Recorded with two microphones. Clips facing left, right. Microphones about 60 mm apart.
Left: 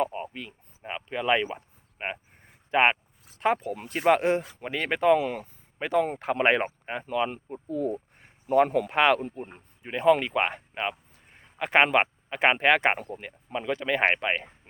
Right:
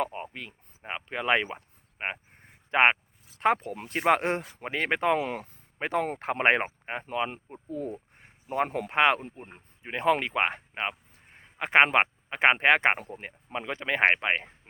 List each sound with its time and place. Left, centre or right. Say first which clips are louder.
0.0 s a sound: left 3 dB; right
0.8 s speech: left 2 dB; right
2.6 s a sound: even; right
3.8 s speech: left 2 dB; right
5.1 s speech: left 4 dB; right
5.4 s speech: even; right
8.2 s speech: left 7 dB; centre
9.8 s speech: left 4 dB; right
11.3 s a sound: right 1 dB; right
11.9 s speech: left 1 dB; right
13.1 s speech: left 2 dB; right